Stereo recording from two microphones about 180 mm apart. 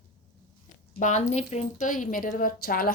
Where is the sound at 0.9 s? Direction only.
40° left (ahead or behind).